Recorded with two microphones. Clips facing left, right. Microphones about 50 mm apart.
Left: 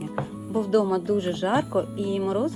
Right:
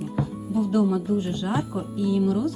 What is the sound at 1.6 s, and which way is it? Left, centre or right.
Speech, left.